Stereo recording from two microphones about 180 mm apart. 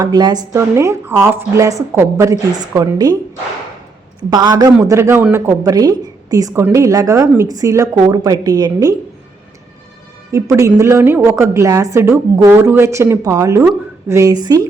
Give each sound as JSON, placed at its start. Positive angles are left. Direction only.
{"t": 0.0, "sound": "a woman's voice", "side_deg": -25}
{"t": 4.2, "sound": "a man's voice", "side_deg": -25}
{"t": 10.3, "sound": "a woman's voice", "side_deg": -15}